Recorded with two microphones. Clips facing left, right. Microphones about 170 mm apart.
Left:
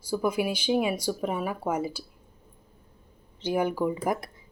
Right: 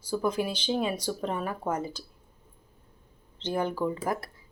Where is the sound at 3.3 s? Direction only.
10° left (ahead or behind).